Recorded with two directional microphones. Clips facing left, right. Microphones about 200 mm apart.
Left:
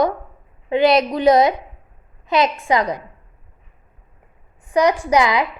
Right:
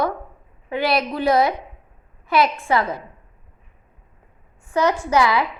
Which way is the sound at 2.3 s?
20° left (ahead or behind).